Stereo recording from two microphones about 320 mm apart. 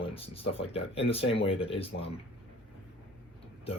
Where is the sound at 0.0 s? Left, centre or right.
Centre.